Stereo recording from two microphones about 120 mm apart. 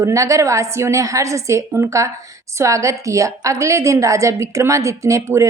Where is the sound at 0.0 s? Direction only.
25° right (ahead or behind).